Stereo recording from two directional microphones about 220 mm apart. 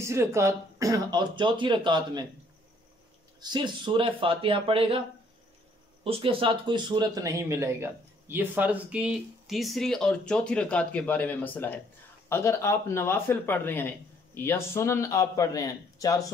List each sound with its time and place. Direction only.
0.0 s speech: 15° right (ahead or behind)
3.3 s speech: 20° right (ahead or behind)
6.0 s a man's voice: 25° right (ahead or behind); by 16.2 s 15° left (ahead or behind)